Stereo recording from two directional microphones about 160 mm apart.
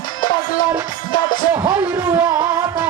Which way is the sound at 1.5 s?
15° right (ahead or behind).